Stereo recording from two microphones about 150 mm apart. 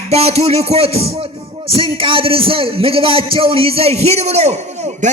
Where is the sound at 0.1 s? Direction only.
45° right (ahead or behind).